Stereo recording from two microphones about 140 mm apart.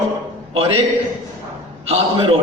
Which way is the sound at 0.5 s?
40° right (ahead or behind).